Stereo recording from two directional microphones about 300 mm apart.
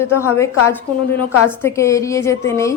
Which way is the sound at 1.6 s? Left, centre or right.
Centre.